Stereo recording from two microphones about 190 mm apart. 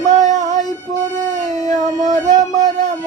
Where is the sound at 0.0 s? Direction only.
20° left (ahead or behind).